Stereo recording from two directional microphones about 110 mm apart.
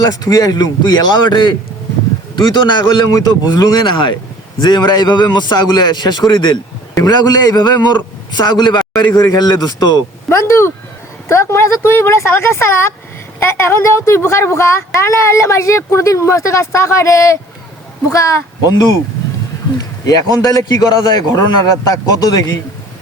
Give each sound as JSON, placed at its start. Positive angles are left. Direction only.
{"t": 0.0, "sound": "a man's voice", "side_deg": 35}
{"t": 3.9, "sound": "a man's voice", "side_deg": 50}
{"t": 10.2, "sound": "a woman's voice", "side_deg": 25}
{"t": 19.8, "sound": "a sound", "side_deg": 35}
{"t": 20.4, "sound": "a man's voice", "side_deg": 35}